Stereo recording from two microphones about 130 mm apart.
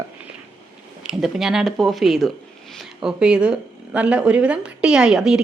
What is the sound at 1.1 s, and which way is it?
Speech, centre (ahead or behind).